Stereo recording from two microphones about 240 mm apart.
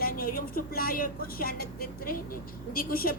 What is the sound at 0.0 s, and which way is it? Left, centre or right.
Speech, left.